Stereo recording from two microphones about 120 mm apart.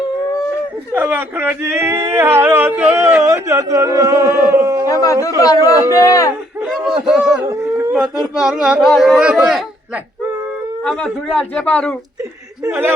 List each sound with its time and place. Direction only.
0.9 s speech: 15° right (ahead or behind)
4.9 s speech: 30° left (ahead or behind)
7.1 s a sound: 5° right (ahead or behind)
9.2 s a man's voice: 10° right (ahead or behind)
10.8 s speech: 5° left (ahead or behind)